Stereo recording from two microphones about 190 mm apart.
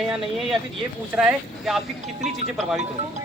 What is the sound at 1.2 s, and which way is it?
Speech, 5° right (ahead or behind).